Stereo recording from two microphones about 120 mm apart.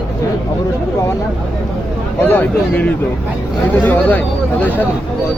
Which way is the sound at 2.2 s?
15° left (ahead or behind).